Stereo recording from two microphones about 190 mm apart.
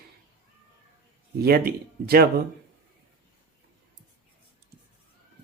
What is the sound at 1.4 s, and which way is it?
Speech, 55° right (ahead or behind).